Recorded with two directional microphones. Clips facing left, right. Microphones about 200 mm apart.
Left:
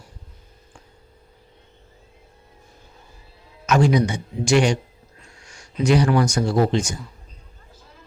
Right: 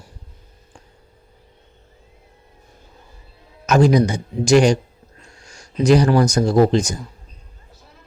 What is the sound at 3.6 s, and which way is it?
Speech, 40° right (ahead or behind).